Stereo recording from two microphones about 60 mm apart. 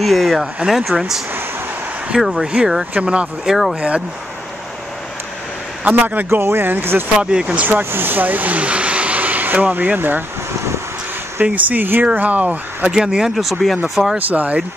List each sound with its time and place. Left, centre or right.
0.0 s speech: centre
2.9 s speech: centre
3.4 s speech: centre
5.9 s speech: right
7.2 s speech: centre
7.6 s speech: right
11.4 s speech: right
12.9 s speech: centre
14.1 s speech: right